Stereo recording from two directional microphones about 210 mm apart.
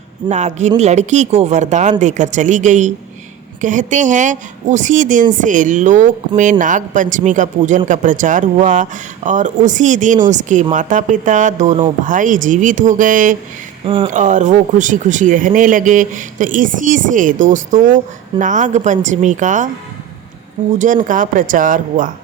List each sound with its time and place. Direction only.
0.3 s a woman's voice: 35° right (ahead or behind)
13.8 s speech: 25° right (ahead or behind)
14.1 s a woman's voice: 35° right (ahead or behind)
20.7 s a woman's voice: 40° right (ahead or behind)